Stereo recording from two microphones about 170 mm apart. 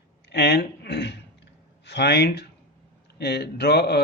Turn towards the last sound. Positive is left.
turn(degrees=75)  # may be behind; listen again after turning